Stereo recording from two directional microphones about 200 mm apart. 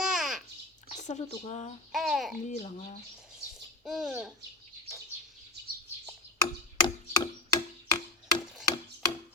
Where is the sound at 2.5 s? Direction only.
30° left (ahead or behind).